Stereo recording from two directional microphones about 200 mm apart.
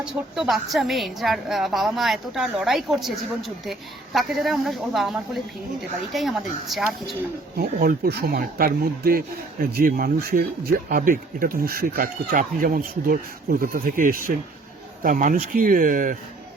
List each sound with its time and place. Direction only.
0.0 s a woman's voice: centre (ahead or behind)
7.5 s speech: 50° right (ahead or behind)